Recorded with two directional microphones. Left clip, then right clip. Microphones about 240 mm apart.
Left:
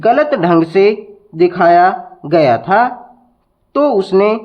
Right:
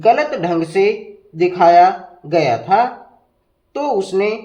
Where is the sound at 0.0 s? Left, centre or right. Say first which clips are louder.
Left 3 dB; left.